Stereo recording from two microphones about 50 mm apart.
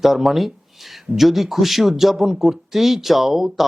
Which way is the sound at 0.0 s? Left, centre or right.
Centre.